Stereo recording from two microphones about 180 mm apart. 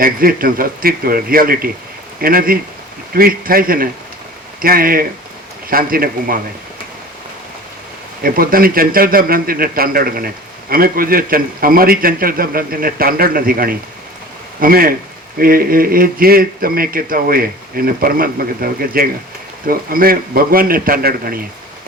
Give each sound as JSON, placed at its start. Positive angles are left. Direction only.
{"t": 0.0, "sound": "a man's voice", "side_deg": -55}
{"t": 8.2, "sound": "a man's voice", "side_deg": -55}